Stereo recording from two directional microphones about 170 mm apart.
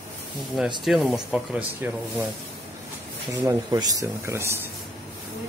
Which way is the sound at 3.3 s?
20° right (ahead or behind).